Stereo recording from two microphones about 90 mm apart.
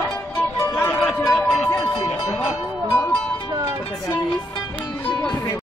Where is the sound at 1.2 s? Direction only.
30° left (ahead or behind).